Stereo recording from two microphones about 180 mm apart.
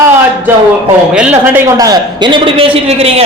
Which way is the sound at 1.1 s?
5° right (ahead or behind).